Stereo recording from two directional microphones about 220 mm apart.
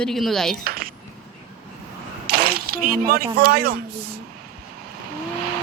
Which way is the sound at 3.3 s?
45° right (ahead or behind).